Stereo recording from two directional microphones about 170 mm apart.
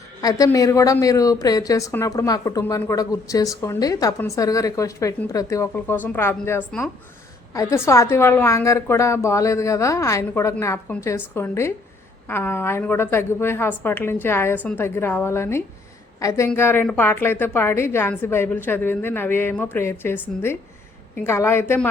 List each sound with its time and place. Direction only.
0.2 s a woman's voice: 20° left (ahead or behind)
7.5 s a woman's voice: 20° left (ahead or behind)